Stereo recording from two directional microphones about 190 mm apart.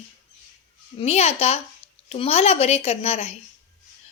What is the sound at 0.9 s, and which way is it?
A woman's voice, 35° left (ahead or behind).